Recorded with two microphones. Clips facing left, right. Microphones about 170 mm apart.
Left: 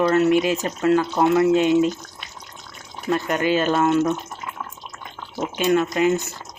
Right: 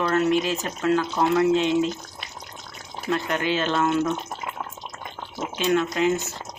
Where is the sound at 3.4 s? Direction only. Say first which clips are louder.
Left 5 dB; 45° left (ahead or behind).